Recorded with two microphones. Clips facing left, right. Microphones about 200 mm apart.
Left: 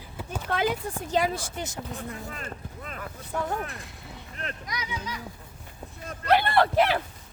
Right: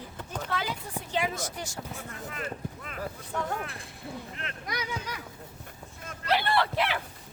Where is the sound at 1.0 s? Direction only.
40° left (ahead or behind); by 1.8 s 20° left (ahead or behind).